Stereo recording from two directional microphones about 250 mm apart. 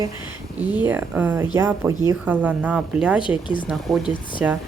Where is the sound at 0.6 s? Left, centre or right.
Centre.